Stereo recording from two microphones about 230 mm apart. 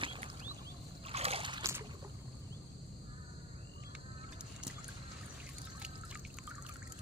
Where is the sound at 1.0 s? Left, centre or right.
Right.